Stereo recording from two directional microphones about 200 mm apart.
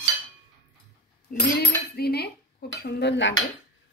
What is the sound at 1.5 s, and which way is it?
Cutlery, 50° left (ahead or behind).